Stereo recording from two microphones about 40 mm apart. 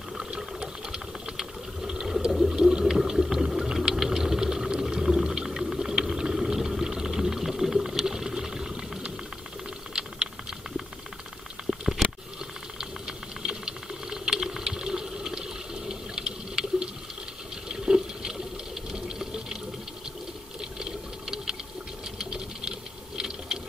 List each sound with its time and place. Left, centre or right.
0.6 s a sound: centre
9.9 s typing: right
12.0 s a sound: centre
12.7 s typing: centre
15.9 s water: centre
20.8 s sewing machine: centre